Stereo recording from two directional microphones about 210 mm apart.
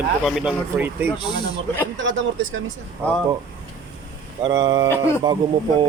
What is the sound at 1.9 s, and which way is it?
Speech, 60° right (ahead or behind).